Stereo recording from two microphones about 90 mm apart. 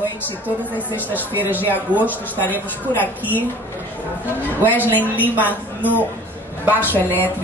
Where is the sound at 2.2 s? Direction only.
20° left (ahead or behind).